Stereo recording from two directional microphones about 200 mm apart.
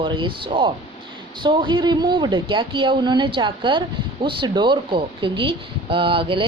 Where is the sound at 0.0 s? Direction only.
25° right (ahead or behind).